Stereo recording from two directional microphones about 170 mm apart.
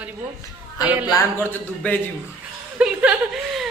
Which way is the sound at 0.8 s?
10° right (ahead or behind).